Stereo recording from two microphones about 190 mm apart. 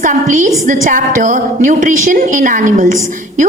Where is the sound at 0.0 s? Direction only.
40° right (ahead or behind).